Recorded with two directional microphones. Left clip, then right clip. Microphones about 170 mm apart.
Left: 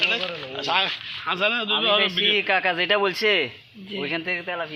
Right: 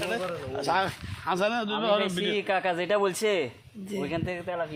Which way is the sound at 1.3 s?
90° right.